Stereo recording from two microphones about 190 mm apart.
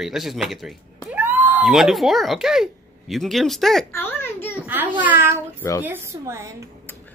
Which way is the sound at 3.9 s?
10° left (ahead or behind).